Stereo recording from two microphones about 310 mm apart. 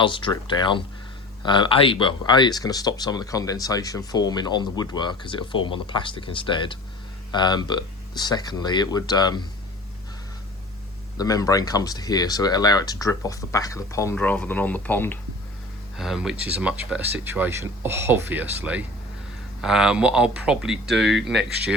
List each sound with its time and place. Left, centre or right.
0.0 s speech: centre
11.2 s speech: centre